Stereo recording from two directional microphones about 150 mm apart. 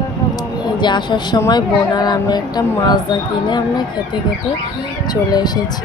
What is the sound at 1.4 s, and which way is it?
Speech, 25° left (ahead or behind).